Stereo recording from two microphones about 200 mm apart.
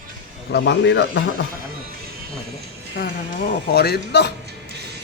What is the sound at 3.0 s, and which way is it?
A man's voice, 55° left (ahead or behind).